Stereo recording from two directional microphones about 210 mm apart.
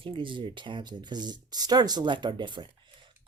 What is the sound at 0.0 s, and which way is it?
Speech, 25° right (ahead or behind).